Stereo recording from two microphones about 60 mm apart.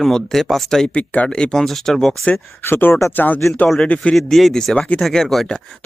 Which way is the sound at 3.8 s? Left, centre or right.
Left.